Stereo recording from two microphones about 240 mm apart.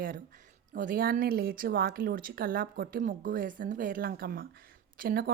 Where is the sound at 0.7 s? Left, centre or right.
Right.